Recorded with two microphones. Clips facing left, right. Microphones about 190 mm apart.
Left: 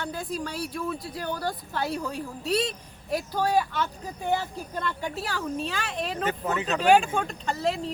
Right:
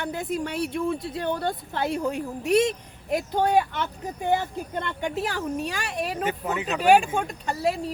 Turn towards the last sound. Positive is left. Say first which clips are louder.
# right 2 dB
turn(degrees=-10)  # may be behind; listen again after turning